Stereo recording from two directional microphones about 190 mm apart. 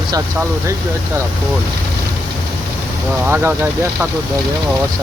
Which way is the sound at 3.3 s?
10° right (ahead or behind).